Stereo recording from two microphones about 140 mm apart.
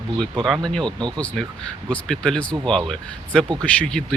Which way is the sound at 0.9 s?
35° right (ahead or behind).